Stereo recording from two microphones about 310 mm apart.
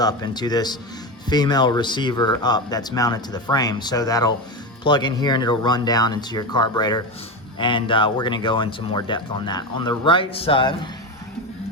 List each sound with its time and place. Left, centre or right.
0.0 s speech: centre